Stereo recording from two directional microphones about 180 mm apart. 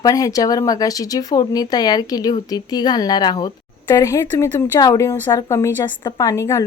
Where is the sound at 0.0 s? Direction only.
20° left (ahead or behind).